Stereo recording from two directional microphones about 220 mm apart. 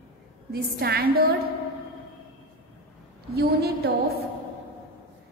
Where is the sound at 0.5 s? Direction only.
45° right (ahead or behind).